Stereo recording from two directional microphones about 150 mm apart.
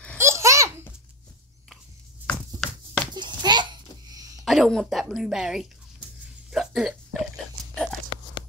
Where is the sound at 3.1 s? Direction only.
30° right (ahead or behind).